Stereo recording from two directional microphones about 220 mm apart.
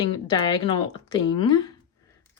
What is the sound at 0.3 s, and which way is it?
Speech, 20° left (ahead or behind).